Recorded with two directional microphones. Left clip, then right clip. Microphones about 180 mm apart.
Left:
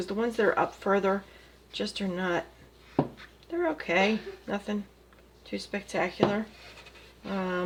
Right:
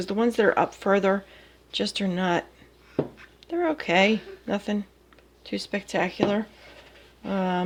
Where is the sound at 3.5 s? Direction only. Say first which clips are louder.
Right 4 dB; 45° right (ahead or behind).